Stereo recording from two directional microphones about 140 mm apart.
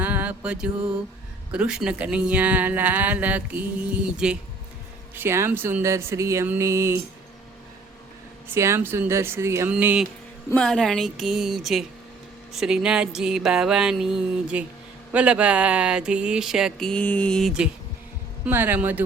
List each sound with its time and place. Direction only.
0.0 s mantra: 10° right (ahead or behind)
1.5 s speech: 5° right (ahead or behind)
5.1 s speech: 15° right (ahead or behind)
8.4 s speech: 20° right (ahead or behind)
9.7 s speech: 5° right (ahead or behind)
10.5 s a sound: 5° left (ahead or behind)
18.4 s speech: 15° right (ahead or behind)